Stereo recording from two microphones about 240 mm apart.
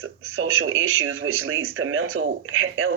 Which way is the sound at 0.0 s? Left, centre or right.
Right.